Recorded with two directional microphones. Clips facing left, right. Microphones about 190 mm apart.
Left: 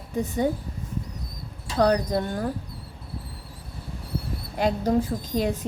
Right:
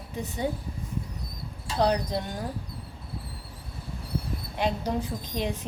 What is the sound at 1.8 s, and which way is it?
Speech, 50° left (ahead or behind).